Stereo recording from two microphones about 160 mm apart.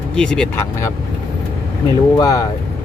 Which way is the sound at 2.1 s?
25° left (ahead or behind).